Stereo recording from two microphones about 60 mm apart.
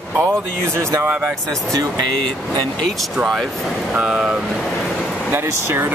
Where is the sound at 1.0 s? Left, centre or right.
Right.